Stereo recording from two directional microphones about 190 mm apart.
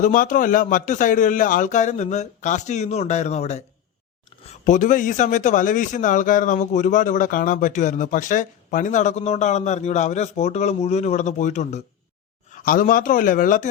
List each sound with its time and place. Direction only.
0.0 s a man's voice: 45° left (ahead or behind)
4.6 s a man's voice: 40° left (ahead or behind)